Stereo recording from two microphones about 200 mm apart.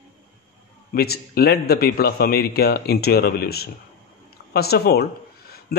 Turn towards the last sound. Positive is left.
turn(degrees=50)  # may be behind; listen again after turning